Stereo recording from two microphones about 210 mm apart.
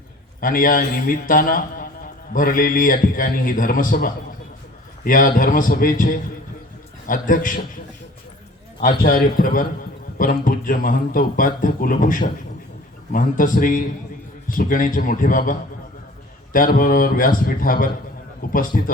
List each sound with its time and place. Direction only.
0.3 s a man's voice: 40° left (ahead or behind)
8.8 s a man's voice: 40° left (ahead or behind)